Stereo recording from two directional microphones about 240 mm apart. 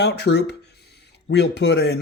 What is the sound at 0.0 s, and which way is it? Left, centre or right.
Speech, left.